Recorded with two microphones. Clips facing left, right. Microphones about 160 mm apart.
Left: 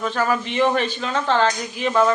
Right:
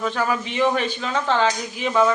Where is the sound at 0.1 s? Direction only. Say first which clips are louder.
Left 2 dB; 5° right (ahead or behind).